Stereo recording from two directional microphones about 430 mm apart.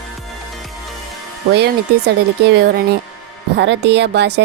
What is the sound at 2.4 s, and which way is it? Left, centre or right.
Speech, right.